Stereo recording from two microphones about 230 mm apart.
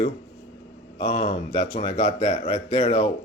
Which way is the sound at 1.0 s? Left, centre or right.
Left.